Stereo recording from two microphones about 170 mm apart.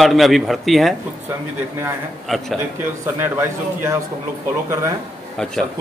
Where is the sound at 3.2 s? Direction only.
15° right (ahead or behind).